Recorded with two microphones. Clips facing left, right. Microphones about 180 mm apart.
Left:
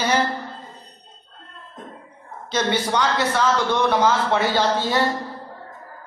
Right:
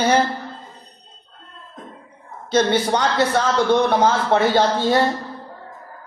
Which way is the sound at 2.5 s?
45° right (ahead or behind).